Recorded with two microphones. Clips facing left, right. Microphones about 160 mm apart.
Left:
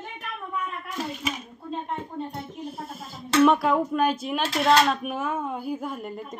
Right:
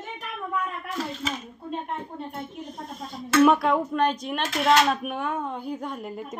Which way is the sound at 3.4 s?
Centre (ahead or behind).